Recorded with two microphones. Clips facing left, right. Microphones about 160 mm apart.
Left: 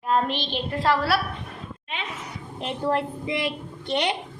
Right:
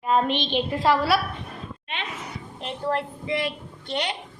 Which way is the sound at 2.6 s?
15° left (ahead or behind).